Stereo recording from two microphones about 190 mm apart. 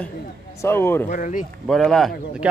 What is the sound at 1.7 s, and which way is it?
Speech, centre (ahead or behind).